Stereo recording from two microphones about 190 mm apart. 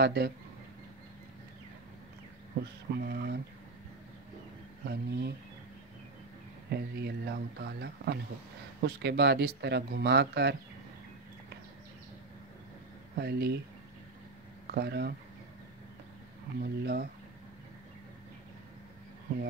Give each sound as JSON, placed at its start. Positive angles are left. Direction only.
{"t": 0.0, "sound": "speech", "side_deg": -60}
{"t": 2.6, "sound": "speech", "side_deg": -55}
{"t": 4.8, "sound": "speech", "side_deg": -55}
{"t": 6.7, "sound": "speech", "side_deg": -60}
{"t": 13.1, "sound": "speech", "side_deg": -60}
{"t": 14.7, "sound": "speech", "side_deg": -55}
{"t": 16.6, "sound": "speech", "side_deg": -55}